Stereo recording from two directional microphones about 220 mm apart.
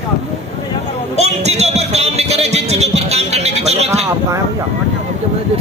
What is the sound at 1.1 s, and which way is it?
Music, 30° right (ahead or behind).